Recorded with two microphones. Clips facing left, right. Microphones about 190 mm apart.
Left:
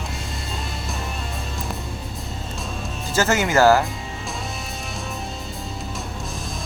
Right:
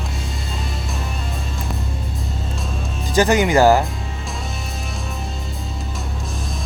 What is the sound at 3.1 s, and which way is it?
Speech, 15° right (ahead or behind).